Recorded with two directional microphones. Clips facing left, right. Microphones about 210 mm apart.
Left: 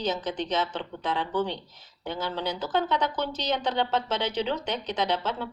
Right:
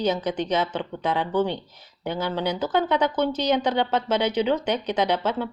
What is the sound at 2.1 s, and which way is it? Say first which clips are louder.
Speech: right 5 dB; 60° right (ahead or behind).